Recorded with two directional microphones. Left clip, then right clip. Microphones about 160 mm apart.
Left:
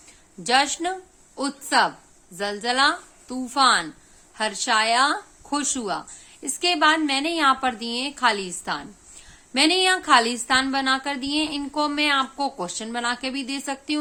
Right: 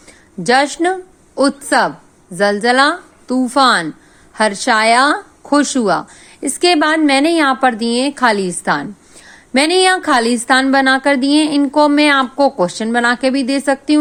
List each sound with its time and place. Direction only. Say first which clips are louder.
0.4 s speech: right 8 dB; 35° right (ahead or behind)